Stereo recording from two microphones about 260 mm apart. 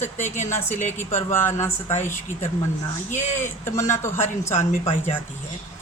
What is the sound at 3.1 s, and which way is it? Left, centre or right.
Speech, left.